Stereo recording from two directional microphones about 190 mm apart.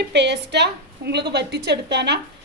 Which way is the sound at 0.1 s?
65° right (ahead or behind).